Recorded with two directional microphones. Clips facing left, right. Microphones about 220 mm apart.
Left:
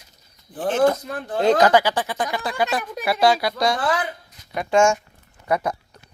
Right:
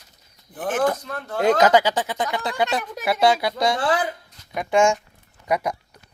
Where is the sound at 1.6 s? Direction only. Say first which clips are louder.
Even; 15° right (ahead or behind).